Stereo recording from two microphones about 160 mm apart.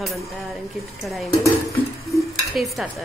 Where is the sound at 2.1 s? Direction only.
Centre (ahead or behind).